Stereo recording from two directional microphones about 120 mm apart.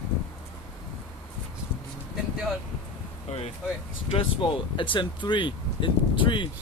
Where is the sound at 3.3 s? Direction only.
75° left (ahead or behind).